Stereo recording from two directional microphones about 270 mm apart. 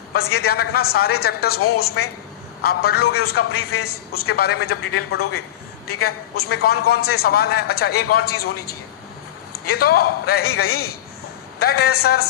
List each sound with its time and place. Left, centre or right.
0.1 s a man's voice: left